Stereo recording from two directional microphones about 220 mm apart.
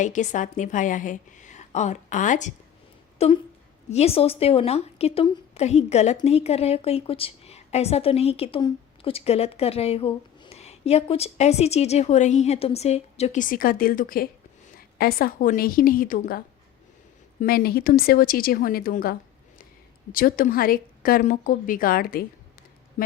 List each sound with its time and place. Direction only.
0.0 s a woman's voice: 35° left (ahead or behind)
17.4 s a woman's voice: 40° left (ahead or behind)
20.1 s a woman's voice: 40° left (ahead or behind)